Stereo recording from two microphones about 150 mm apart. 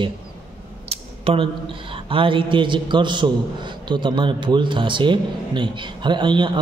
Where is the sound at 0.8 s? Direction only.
40° right (ahead or behind).